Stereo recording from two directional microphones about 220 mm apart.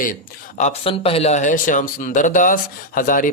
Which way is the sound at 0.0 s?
35° left (ahead or behind).